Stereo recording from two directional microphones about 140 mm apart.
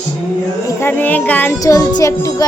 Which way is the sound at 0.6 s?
15° left (ahead or behind).